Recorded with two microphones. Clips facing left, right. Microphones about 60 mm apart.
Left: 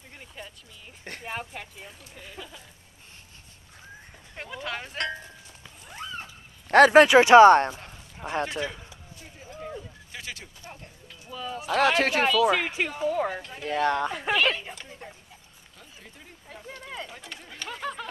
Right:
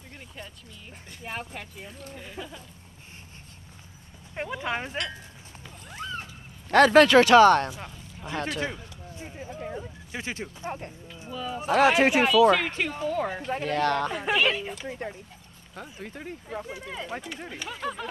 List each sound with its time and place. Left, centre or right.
0.4 s a sound: centre
1.2 s speech: centre
4.4 s speech: right
6.7 s speech: left
9.1 s a sound: right
9.5 s a sound: centre
9.8 s a sound: right
11.3 s speech: centre
12.4 s speech: centre
14.1 s speech: centre
14.9 s speech: right
15.7 s speech: right
16.6 s speech: centre